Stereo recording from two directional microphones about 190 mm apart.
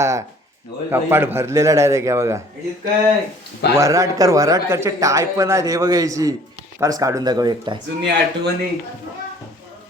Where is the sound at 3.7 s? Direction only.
15° right (ahead or behind).